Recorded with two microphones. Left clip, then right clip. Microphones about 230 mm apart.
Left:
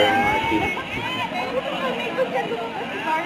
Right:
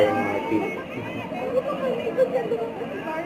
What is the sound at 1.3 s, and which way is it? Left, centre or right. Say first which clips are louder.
Chatter: left 1 dB; centre.